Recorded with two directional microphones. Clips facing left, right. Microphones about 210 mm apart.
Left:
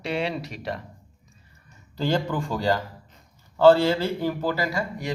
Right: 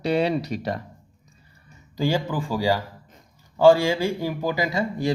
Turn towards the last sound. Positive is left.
turn(degrees=-30)  # may be behind; listen again after turning